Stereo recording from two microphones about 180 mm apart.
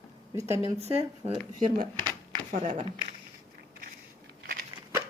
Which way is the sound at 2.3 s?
45° right (ahead or behind).